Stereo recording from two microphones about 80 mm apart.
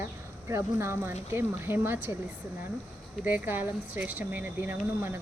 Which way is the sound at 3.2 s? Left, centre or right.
Right.